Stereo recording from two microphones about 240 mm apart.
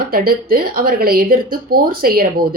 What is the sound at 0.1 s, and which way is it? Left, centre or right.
Speech, right.